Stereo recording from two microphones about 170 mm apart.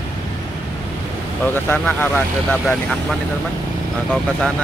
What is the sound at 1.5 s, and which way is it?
Speech, 10° left (ahead or behind).